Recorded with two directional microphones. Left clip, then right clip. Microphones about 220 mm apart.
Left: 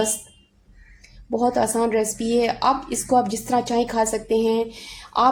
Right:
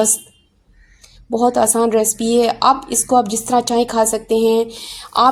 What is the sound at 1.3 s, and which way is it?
Speech, 25° right (ahead or behind).